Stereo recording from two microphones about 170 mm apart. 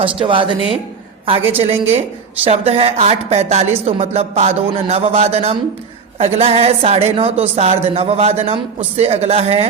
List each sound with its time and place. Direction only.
0.0 s a woman's voice: 30° right (ahead or behind)